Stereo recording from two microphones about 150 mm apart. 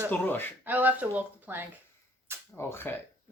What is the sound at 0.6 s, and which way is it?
Speech, 10° right (ahead or behind).